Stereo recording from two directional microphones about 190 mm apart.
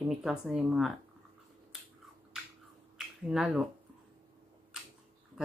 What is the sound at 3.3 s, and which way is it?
Speech, centre (ahead or behind).